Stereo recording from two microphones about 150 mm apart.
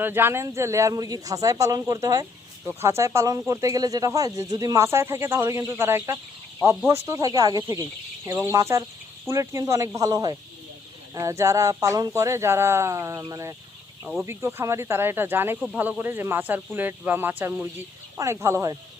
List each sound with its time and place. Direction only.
0.0 s speech: 15° right (ahead or behind)